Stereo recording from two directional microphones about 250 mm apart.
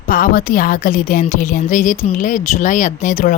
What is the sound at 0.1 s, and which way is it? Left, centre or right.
A woman's voice, left.